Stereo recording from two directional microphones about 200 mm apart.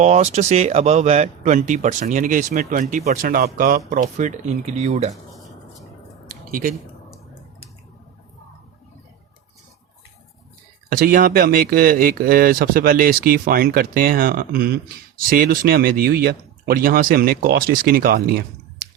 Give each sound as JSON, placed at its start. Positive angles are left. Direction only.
{"t": 0.0, "sound": "speech", "side_deg": -35}
{"t": 6.5, "sound": "speech", "side_deg": -40}
{"t": 10.8, "sound": "speech", "side_deg": -45}